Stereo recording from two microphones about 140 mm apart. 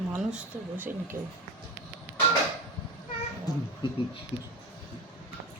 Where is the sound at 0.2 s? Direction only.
5° right (ahead or behind).